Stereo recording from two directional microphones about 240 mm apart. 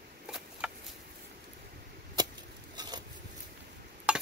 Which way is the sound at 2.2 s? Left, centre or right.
Centre.